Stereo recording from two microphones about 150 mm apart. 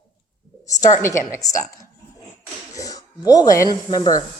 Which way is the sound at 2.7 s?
25° left (ahead or behind).